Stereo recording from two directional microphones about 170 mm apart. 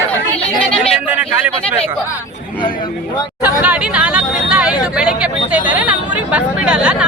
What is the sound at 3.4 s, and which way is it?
Speech, 10° right (ahead or behind).